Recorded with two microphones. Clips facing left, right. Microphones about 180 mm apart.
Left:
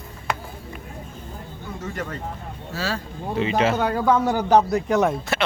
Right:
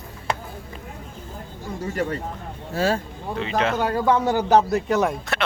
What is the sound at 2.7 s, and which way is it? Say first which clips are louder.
Speech: right 6 dB; 50° right (ahead or behind).